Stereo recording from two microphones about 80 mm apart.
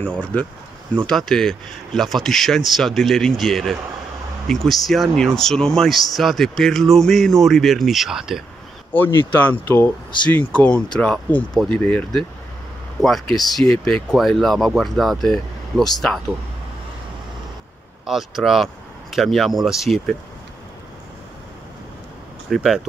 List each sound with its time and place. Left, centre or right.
0.0 s speech: centre
8.9 s speech: left
13.0 s speech: centre
13.7 s speech: centre
14.1 s speech: centre
18.0 s speech: centre
22.5 s speech: centre